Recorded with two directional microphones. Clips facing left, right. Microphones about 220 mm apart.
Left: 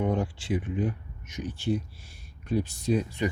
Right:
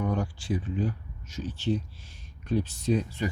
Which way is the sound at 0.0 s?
25° left (ahead or behind).